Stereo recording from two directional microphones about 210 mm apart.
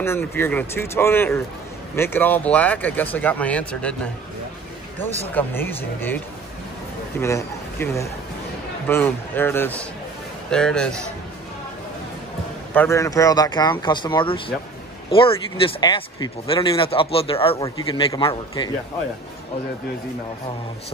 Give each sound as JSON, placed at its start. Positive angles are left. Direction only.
{"t": 0.0, "sound": "speech", "side_deg": 10}
{"t": 5.3, "sound": "a man's voice", "side_deg": 10}
{"t": 12.7, "sound": "speech", "side_deg": 10}
{"t": 17.6, "sound": "speech", "side_deg": 15}